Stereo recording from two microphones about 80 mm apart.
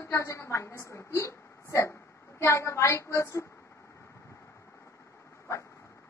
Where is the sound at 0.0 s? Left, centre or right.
Left.